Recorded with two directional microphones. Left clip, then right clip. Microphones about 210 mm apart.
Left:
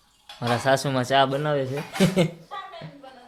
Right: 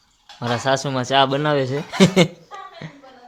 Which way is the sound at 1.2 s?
25° right (ahead or behind).